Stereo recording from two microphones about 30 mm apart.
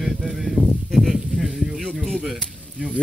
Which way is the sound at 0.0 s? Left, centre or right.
Centre.